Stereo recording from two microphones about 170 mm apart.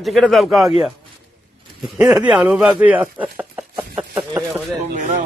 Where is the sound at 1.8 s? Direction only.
5° right (ahead or behind).